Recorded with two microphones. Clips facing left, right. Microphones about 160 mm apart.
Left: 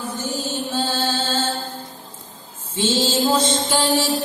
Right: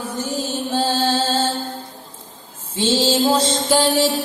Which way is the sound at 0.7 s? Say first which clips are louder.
Right 5 dB; 35° right (ahead or behind).